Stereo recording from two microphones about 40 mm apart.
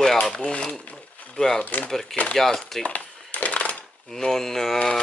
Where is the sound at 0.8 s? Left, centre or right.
Left.